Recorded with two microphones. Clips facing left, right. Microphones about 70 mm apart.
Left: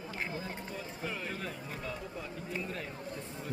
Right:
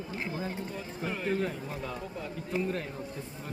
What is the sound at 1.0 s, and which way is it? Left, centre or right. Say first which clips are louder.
Speech: right 8 dB; right.